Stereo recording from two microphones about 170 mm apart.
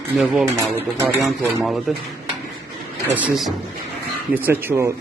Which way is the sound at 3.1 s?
5° right (ahead or behind).